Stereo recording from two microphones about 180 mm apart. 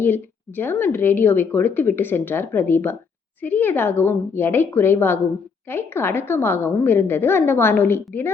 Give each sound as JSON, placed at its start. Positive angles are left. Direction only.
{"t": 0.0, "sound": "speech", "side_deg": 10}